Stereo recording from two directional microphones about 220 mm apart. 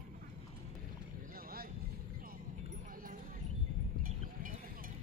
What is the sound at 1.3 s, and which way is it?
Vehicle, 40° right (ahead or behind).